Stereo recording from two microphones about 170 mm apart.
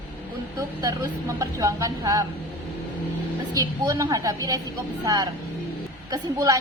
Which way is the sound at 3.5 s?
20° right (ahead or behind).